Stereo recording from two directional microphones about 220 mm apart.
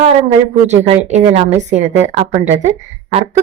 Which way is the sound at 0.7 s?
30° right (ahead or behind).